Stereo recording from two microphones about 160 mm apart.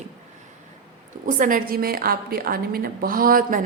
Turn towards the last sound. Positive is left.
turn(degrees=-60)  # may be behind; listen again after turning